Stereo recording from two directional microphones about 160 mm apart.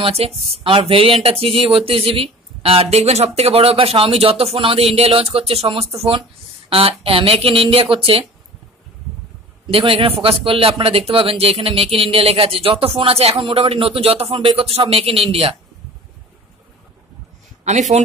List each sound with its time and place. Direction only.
0.0 s a man's voice: 35° right (ahead or behind)
9.7 s a man's voice: 35° right (ahead or behind)